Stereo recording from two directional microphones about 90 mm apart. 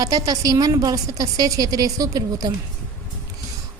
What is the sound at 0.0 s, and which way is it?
A woman's voice, 40° right (ahead or behind).